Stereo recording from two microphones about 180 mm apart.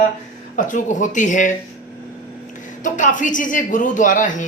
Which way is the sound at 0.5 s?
45° left (ahead or behind).